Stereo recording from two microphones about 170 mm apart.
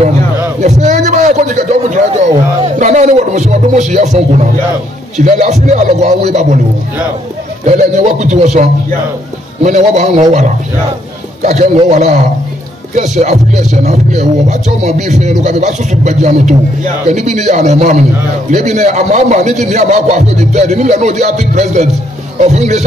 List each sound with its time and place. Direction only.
0.6 s a sound: 45° right (ahead or behind)
2.6 s speech: 45° right (ahead or behind)
7.6 s speech: 40° right (ahead or behind)
11.4 s a man's voice: 40° right (ahead or behind)